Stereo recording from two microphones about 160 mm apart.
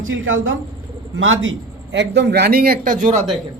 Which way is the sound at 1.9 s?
90° right.